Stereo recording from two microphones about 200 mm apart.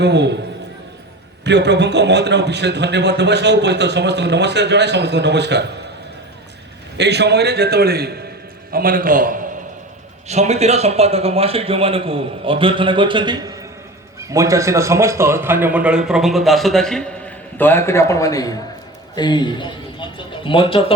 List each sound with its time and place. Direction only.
0.0 s a man's voice: 60° right (ahead or behind)
1.5 s a man's voice: 60° right (ahead or behind)
6.9 s a man's voice: 60° right (ahead or behind); by 20.9 s 25° left (ahead or behind)